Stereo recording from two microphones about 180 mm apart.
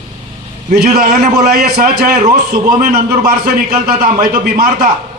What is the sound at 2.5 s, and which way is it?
A man's voice, 55° right (ahead or behind).